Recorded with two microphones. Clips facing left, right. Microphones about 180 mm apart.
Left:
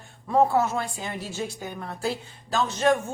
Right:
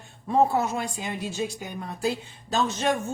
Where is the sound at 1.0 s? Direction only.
15° right (ahead or behind).